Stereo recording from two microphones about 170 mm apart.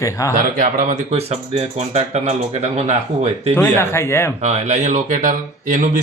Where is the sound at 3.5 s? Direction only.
15° left (ahead or behind).